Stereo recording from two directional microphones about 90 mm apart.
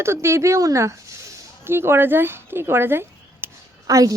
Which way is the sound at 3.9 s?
40° right (ahead or behind).